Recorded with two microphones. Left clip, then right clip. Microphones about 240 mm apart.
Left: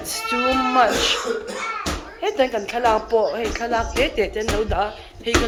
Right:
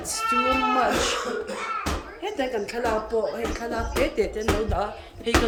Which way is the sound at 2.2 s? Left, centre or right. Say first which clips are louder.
Left 7 dB; centre.